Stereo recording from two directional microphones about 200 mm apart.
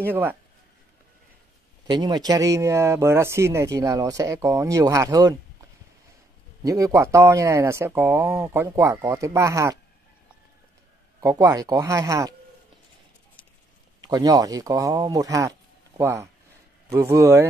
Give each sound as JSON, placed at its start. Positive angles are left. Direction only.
{"t": 0.0, "sound": "speech", "side_deg": -10}
{"t": 1.9, "sound": "speech", "side_deg": -20}
{"t": 6.6, "sound": "speech", "side_deg": -15}
{"t": 11.1, "sound": "speech", "side_deg": -15}
{"t": 14.0, "sound": "speech", "side_deg": -20}